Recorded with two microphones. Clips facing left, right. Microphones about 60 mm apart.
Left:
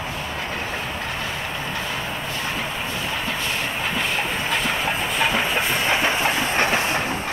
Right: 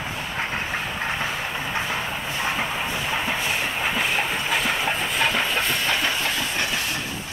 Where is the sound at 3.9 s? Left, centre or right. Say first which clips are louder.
Even; centre; by 7.0 s left.